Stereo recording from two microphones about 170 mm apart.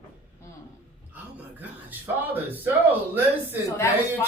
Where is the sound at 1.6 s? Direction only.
10° right (ahead or behind).